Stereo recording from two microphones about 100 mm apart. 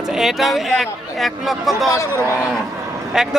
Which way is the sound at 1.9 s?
30° left (ahead or behind).